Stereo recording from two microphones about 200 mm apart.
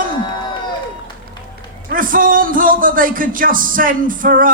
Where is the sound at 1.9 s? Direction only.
45° right (ahead or behind).